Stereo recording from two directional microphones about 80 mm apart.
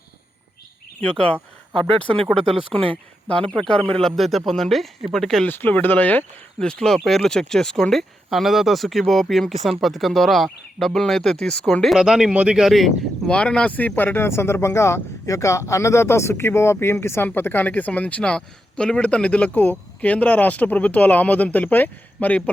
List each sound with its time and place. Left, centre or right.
1.0 s speech: centre
5.5 s speech: left
6.6 s speech: centre
11.9 s speech: centre
13.2 s speech: centre